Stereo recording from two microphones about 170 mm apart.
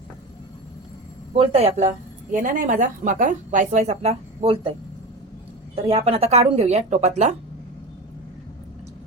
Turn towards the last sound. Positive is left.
turn(degrees=-40)  # may be behind; listen again after turning